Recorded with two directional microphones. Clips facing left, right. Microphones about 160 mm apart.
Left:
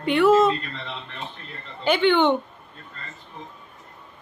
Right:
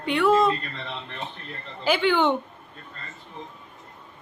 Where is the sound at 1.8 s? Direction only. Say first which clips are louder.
Left 3 dB; centre (ahead or behind).